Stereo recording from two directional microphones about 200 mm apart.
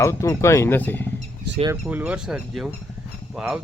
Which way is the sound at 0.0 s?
15° left (ahead or behind).